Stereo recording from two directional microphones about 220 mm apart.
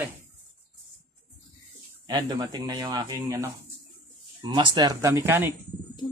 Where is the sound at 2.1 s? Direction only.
20° right (ahead or behind).